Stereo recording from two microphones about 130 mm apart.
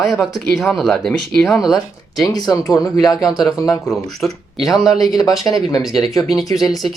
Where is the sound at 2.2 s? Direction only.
30° left (ahead or behind).